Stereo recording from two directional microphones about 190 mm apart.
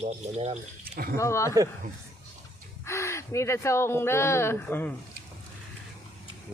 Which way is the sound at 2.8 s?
15° left (ahead or behind).